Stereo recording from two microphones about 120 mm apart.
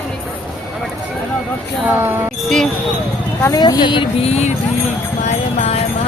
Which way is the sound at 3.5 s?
35° left (ahead or behind).